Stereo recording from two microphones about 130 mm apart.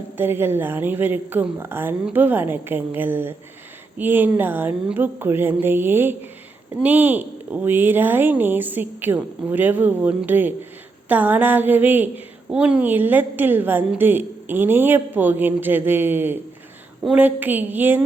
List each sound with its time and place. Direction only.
0.2 s a woman's voice: 15° right (ahead or behind)